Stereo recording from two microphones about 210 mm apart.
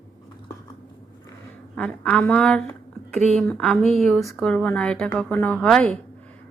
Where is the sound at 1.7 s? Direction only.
5° left (ahead or behind).